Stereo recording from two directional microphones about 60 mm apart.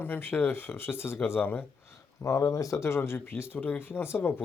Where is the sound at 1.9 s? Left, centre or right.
Left.